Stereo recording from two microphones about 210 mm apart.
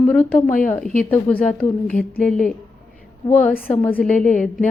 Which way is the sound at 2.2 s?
5° left (ahead or behind).